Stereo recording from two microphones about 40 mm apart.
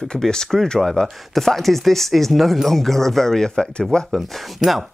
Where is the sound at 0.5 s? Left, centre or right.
Centre.